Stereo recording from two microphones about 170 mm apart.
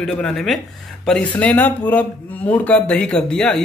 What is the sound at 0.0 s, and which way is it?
Speech, 5° left (ahead or behind).